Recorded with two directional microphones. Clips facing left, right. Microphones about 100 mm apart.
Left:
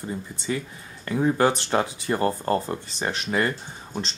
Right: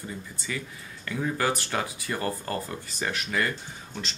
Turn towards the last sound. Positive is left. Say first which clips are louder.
# left 5 dB
turn(degrees=30)  # may be behind; listen again after turning